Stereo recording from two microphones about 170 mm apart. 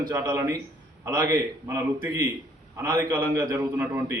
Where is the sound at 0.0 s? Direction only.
20° right (ahead or behind).